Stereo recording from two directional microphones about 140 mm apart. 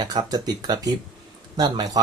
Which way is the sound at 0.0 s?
30° right (ahead or behind).